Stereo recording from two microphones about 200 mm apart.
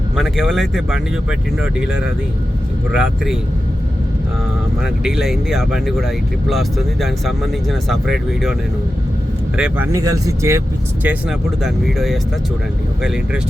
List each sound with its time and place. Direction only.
0.2 s speech: centre (ahead or behind)
4.8 s speech: 5° right (ahead or behind)
9.6 s speech: 5° right (ahead or behind)
11.0 s speech: 5° right (ahead or behind)